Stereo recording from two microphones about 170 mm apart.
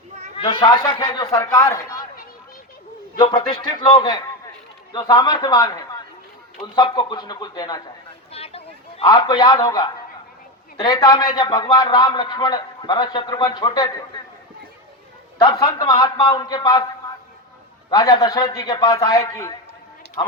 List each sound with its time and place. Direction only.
0.3 s a man's voice: 30° left (ahead or behind)
1.3 s speech: 15° left (ahead or behind)
3.2 s a man's voice: 30° left (ahead or behind)
8.3 s a sound: 35° left (ahead or behind)
9.0 s a man's voice: 25° left (ahead or behind)
15.6 s a man's voice: 20° left (ahead or behind)
18.2 s a man's voice: 20° left (ahead or behind)